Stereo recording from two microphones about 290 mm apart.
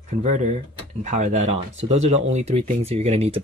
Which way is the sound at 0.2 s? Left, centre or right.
Right.